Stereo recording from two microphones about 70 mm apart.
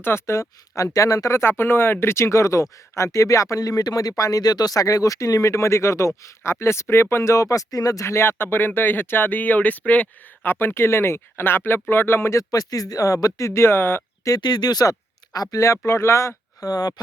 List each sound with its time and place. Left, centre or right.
0.0 s speech: left
0.8 s speech: left
12.4 s speech: left
14.3 s speech: left
15.9 s speech: left
16.6 s speech: left